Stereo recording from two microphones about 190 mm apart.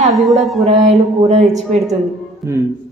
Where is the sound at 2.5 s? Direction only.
15° right (ahead or behind).